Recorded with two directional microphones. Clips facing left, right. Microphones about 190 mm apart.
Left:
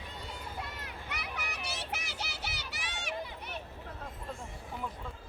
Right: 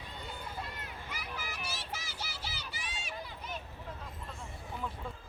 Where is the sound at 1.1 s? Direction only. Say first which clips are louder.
Left 2 dB; 70° left (ahead or behind).